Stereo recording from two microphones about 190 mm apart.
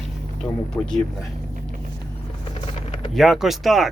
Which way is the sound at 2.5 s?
30° left (ahead or behind).